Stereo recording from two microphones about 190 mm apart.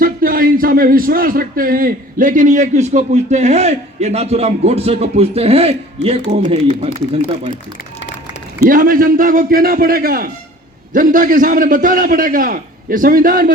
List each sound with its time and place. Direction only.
0.0 s speech: 50° right (ahead or behind); by 7.2 s 30° right (ahead or behind)
8.7 s a man's voice: 45° right (ahead or behind)